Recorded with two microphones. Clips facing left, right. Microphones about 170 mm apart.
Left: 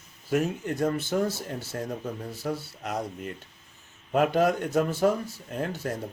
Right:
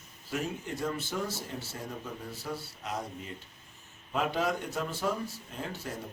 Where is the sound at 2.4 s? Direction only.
60° left (ahead or behind).